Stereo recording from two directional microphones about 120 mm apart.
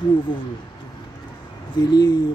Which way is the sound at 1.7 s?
35° left (ahead or behind).